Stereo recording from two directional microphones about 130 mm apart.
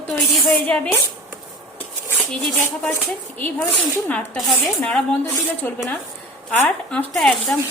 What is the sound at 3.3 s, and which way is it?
Speech, 15° left (ahead or behind).